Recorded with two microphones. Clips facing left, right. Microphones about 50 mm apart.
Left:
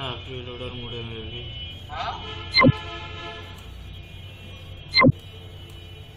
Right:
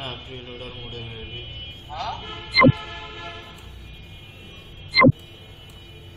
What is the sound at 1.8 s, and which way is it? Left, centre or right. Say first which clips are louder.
Speech: even; left.